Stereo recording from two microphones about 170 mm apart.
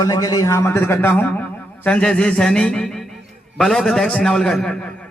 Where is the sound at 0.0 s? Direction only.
20° left (ahead or behind); by 4.9 s 5° left (ahead or behind).